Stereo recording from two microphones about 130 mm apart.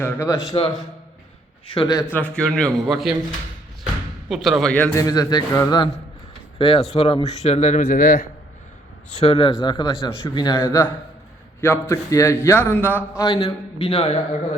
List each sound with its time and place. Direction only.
0.0 s speech: 15° left (ahead or behind)
0.5 s a man's voice: 45° left (ahead or behind)
2.1 s a man's voice: 10° left (ahead or behind)
4.3 s a man's voice: centre (ahead or behind)
4.9 s a man's voice: 25° left (ahead or behind)
6.6 s a man's voice: 45° left (ahead or behind); by 8.2 s 65° left (ahead or behind)
9.2 s a man's voice: 45° left (ahead or behind); by 12.4 s 25° left (ahead or behind)
12.5 s speech: 15° left (ahead or behind)
13.2 s a man's voice: 40° left (ahead or behind)